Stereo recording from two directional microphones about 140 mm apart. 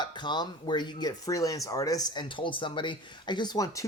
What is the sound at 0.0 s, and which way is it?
Speech, 35° left (ahead or behind).